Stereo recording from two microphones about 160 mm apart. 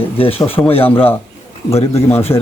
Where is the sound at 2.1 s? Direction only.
40° left (ahead or behind).